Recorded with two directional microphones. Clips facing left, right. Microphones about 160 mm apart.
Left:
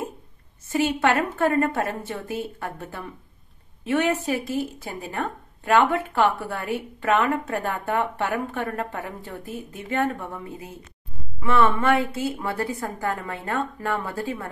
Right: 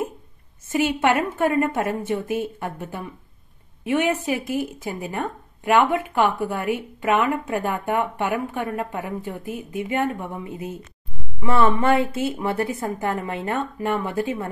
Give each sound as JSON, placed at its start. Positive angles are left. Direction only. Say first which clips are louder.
{"t": 0.7, "sound": "speech", "louder": "right 1 dB", "side_deg": -20}
{"t": 11.3, "sound": "a woman's voice", "louder": "right 1 dB", "side_deg": -25}